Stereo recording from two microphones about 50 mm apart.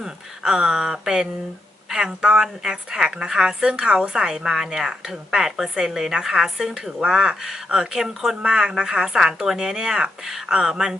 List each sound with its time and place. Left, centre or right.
0.0 s a woman's voice: centre